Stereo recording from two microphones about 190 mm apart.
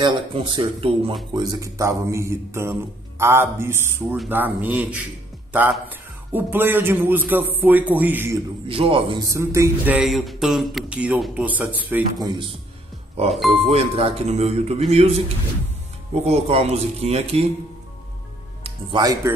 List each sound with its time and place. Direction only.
0.0 s speech: 25° right (ahead or behind)
8.6 s speech: 30° right (ahead or behind); by 12.0 s 10° right (ahead or behind)
12.2 s speech: 20° right (ahead or behind)
13.5 s speech: 35° right (ahead or behind)
18.6 s speech: 25° right (ahead or behind)